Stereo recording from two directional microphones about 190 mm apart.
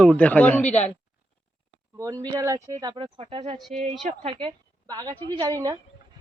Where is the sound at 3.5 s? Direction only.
Centre (ahead or behind).